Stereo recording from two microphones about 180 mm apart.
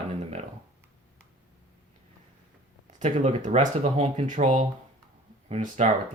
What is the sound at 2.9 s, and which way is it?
Speech, 45° right (ahead or behind).